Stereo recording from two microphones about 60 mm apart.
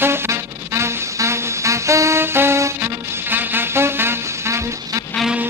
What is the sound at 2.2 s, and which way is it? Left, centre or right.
Music, right.